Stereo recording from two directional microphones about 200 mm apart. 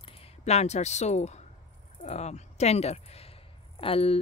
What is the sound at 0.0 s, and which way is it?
A woman's voice, 30° left (ahead or behind).